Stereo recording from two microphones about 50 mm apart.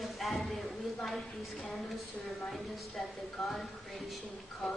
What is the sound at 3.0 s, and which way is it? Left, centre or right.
A woman's voice, centre.